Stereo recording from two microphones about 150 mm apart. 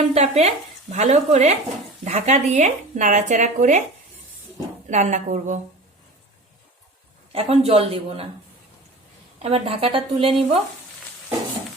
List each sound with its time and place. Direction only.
0.1 s speech: 45° right (ahead or behind)
4.9 s speech: 50° right (ahead or behind)
7.3 s speech: 40° right (ahead or behind)
9.4 s speech: 40° right (ahead or behind)